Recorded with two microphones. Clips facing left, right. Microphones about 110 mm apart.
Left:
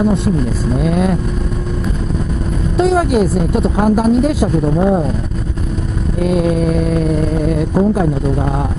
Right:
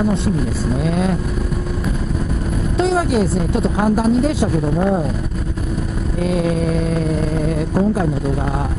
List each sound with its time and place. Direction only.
2.8 s speech: 15° left (ahead or behind)
7.7 s speech: 20° left (ahead or behind)